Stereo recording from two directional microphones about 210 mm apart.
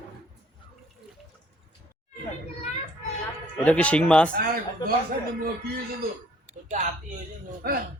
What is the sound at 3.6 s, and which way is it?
Speech, 5° left (ahead or behind).